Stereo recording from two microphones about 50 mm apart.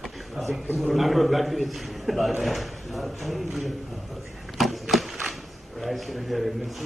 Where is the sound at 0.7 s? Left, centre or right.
Centre.